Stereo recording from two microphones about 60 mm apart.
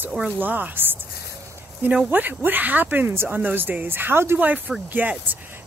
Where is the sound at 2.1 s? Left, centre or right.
Right.